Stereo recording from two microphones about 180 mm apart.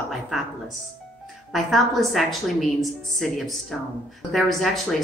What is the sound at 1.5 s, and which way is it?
A woman's voice, centre (ahead or behind).